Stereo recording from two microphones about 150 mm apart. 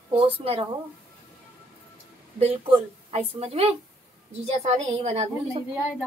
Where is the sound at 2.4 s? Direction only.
40° right (ahead or behind).